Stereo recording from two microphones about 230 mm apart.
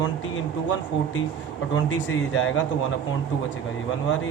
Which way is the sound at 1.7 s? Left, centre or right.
Left.